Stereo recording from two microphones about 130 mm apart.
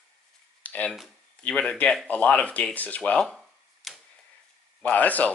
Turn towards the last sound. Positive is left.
turn(degrees=10)  # may be behind; listen again after turning